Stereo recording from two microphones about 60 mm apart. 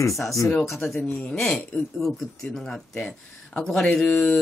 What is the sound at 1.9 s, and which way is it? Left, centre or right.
Speech, centre.